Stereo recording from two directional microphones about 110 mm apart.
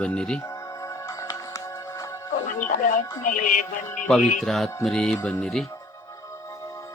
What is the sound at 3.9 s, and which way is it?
Speech, 10° left (ahead or behind).